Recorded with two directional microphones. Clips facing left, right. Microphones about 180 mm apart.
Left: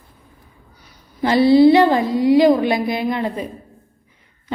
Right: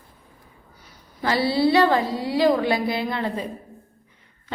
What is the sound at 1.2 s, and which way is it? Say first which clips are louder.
A woman's voice: left 9 dB; 20° left (ahead or behind).